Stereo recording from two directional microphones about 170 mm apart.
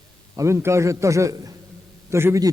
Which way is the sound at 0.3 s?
15° right (ahead or behind).